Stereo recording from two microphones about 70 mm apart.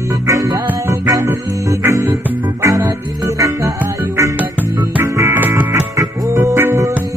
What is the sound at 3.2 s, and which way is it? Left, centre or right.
Music, right.